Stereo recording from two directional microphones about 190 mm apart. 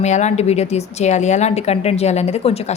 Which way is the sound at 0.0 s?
35° left (ahead or behind).